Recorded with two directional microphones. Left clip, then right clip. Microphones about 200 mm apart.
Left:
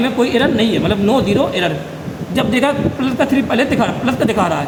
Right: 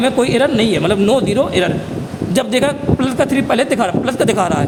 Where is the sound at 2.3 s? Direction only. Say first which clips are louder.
Even; 50° right (ahead or behind).